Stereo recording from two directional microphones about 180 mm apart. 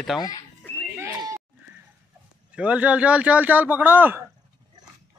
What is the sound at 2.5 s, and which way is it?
A man's voice, 5° right (ahead or behind).